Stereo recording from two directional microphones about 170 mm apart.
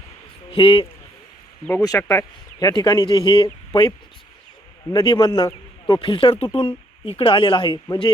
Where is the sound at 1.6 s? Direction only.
20° left (ahead or behind).